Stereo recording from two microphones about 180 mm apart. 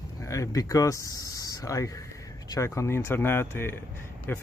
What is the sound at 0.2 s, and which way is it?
Speech, 15° left (ahead or behind).